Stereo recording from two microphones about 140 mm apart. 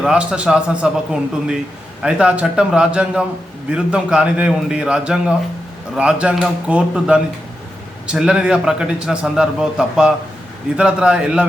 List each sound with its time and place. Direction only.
0.0 s a man's voice: 5° right (ahead or behind)